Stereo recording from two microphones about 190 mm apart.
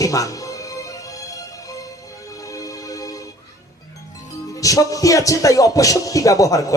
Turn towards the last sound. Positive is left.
turn(degrees=15)  # may be behind; listen again after turning